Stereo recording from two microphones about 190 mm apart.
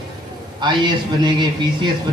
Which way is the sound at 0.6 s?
25° right (ahead or behind).